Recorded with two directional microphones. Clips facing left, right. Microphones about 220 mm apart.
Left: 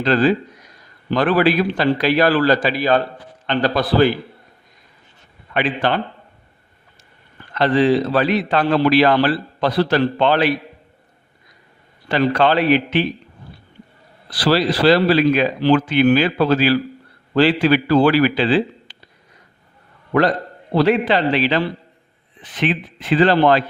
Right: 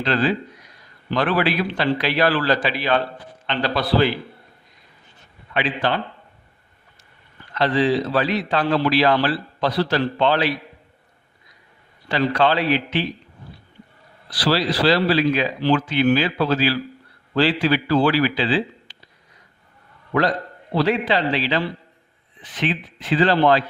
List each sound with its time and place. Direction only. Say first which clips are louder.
0.0 s speech: left 5 dB; 45° left (ahead or behind)
5.5 s a man's voice: left 3 dB; 55° left (ahead or behind)
7.5 s a man's voice: left 4 dB; 55° left (ahead or behind)
12.0 s speech: left 3 dB; 50° left (ahead or behind)
14.3 s a man's voice: left 4 dB; 50° left (ahead or behind)
20.7 s a man's voice: left 4 dB; 55° left (ahead or behind)